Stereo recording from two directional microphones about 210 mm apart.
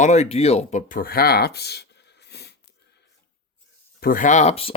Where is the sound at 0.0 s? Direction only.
30° left (ahead or behind); by 2.6 s 50° left (ahead or behind).